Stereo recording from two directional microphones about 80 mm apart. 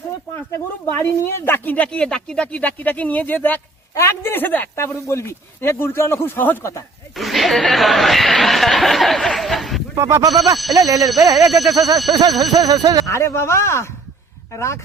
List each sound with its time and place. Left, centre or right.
0.9 s speech: left
4.7 s speech: left
7.2 s speech: centre
9.9 s speech: right
10.5 s speech: centre
10.8 s speech: right
11.4 s speech: centre
12.5 s speech: right
13.1 s speech: left